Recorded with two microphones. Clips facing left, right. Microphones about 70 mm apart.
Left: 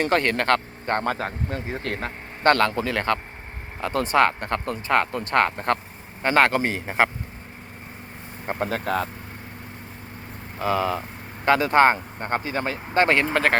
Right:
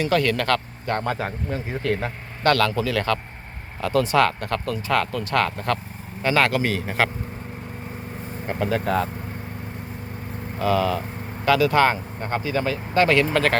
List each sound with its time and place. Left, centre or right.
0.1 s speech: left
8.4 s speech: left
10.6 s speech: left
11.4 s speech: left